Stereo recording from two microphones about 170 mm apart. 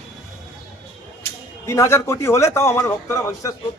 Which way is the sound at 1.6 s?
15° left (ahead or behind).